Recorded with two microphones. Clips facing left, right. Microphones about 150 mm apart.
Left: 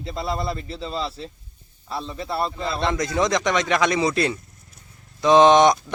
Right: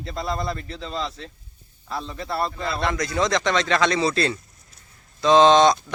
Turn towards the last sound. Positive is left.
turn(degrees=20)  # may be behind; listen again after turning